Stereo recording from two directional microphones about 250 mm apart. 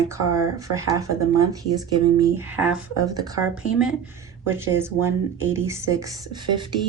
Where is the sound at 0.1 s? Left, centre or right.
Centre.